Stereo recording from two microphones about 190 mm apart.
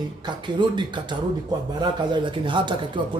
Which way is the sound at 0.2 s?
25° right (ahead or behind).